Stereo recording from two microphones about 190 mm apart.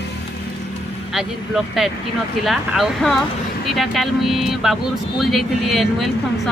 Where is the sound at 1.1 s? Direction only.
Centre (ahead or behind).